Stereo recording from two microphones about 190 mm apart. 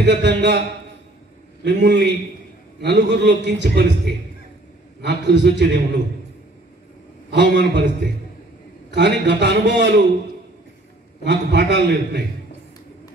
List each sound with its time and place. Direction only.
0.0 s a man's voice: 65° right (ahead or behind)
1.6 s a man's voice: 65° right (ahead or behind)
7.2 s a man's voice: 65° right (ahead or behind)
11.2 s a man's voice: 65° right (ahead or behind)